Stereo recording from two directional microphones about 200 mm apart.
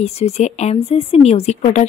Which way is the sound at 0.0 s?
35° left (ahead or behind).